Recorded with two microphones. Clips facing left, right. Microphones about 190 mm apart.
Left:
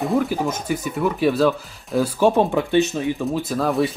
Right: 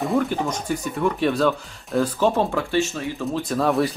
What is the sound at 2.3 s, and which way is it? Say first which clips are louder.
Speech: left 4 dB; 15° left (ahead or behind).